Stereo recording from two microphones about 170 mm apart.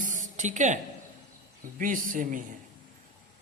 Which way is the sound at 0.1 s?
45° right (ahead or behind).